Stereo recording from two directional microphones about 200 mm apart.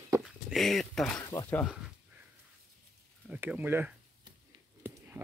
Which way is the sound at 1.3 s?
10° left (ahead or behind).